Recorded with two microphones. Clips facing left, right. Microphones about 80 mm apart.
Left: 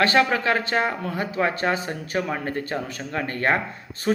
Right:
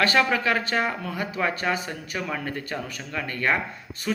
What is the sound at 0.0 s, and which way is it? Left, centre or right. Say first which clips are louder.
A man's voice: left 2 dB; left.